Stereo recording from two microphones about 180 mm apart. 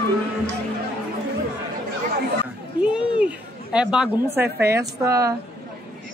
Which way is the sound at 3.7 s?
5° right (ahead or behind).